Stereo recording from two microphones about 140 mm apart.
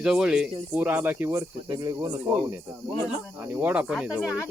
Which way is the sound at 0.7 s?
10° right (ahead or behind).